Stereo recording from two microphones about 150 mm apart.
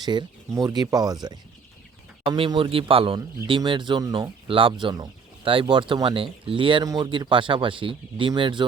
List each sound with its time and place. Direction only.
0.0 s speech: 30° right (ahead or behind)